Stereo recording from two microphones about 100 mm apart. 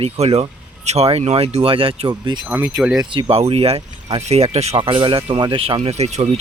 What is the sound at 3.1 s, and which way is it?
Speech, 80° right.